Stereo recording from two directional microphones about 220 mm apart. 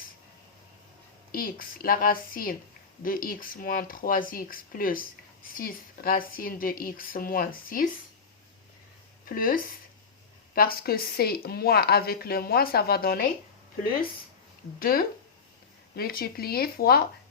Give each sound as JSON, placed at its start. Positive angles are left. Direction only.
{"t": 1.3, "sound": "a woman's voice", "side_deg": 40}
{"t": 9.3, "sound": "a woman's voice", "side_deg": 40}
{"t": 14.8, "sound": "a woman's voice", "side_deg": 40}